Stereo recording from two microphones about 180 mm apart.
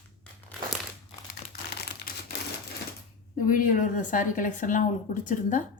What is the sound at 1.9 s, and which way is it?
Crumpling, 65° left (ahead or behind).